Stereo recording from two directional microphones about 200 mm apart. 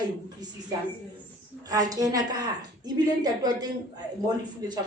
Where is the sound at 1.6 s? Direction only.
20° right (ahead or behind).